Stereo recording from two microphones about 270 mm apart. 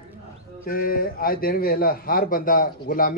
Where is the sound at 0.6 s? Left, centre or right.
Left.